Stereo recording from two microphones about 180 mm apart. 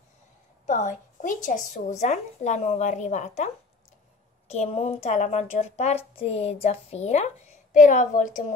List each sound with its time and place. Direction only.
0.7 s a woman's voice: 40° left (ahead or behind)